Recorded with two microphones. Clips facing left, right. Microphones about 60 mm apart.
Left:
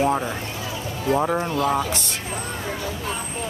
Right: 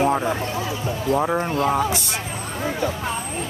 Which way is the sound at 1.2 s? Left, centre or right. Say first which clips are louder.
Right 1 dB; centre.